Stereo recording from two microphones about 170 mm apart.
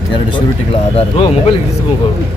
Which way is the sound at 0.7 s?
35° left (ahead or behind).